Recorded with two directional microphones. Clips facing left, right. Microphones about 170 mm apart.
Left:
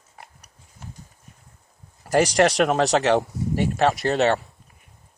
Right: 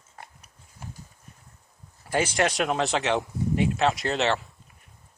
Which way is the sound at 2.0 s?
40° left (ahead or behind).